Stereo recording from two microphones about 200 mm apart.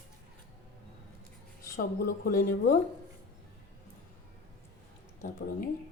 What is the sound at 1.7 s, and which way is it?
Speech, 45° left (ahead or behind).